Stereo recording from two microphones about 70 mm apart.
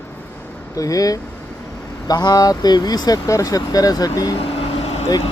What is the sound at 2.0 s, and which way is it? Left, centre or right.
Speech, left.